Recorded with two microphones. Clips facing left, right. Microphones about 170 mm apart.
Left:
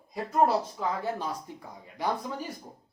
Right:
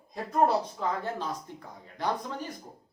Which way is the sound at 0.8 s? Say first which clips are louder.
Left 1 dB; 10° left (ahead or behind).